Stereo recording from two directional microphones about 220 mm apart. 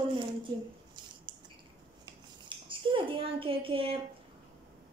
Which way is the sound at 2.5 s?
25° right (ahead or behind).